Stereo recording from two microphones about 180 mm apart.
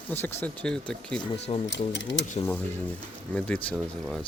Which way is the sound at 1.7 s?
80° left.